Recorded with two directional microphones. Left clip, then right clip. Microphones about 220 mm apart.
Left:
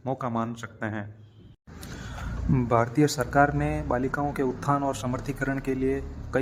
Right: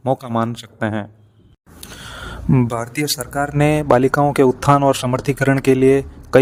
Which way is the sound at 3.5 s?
45° right (ahead or behind).